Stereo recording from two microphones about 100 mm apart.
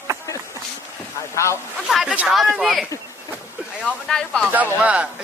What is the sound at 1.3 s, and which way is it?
Speech, 30° left (ahead or behind).